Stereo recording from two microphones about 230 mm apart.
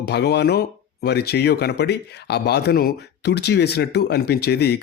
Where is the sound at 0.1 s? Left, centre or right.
Left.